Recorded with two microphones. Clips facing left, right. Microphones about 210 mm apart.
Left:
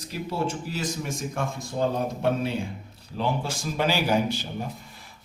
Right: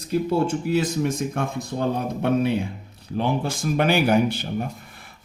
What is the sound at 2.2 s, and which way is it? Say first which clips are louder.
A man's voice: right 7 dB; 60° right (ahead or behind).